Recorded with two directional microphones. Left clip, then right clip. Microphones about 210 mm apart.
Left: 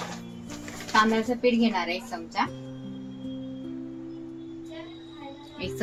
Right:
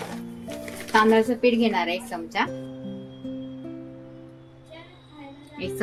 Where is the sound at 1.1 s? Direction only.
35° right (ahead or behind).